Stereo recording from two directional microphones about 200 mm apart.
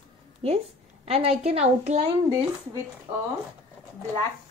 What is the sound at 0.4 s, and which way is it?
A woman's voice, 30° right (ahead or behind).